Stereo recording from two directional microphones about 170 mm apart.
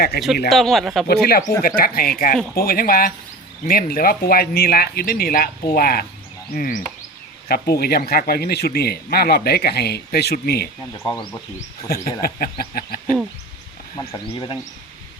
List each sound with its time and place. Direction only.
0.2 s speech: 75° left (ahead or behind)
0.5 s speech: centre (ahead or behind)
1.0 s speech: 65° left (ahead or behind)
11.0 s speech: 20° left (ahead or behind)
11.9 s speech: 65° left (ahead or behind)
14.3 s speech: 25° left (ahead or behind)